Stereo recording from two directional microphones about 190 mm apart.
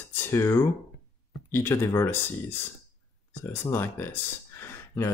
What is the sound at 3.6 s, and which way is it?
Speech, 10° left (ahead or behind).